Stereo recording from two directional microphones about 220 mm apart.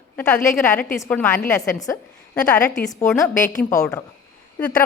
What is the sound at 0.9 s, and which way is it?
A woman's voice, 10° left (ahead or behind).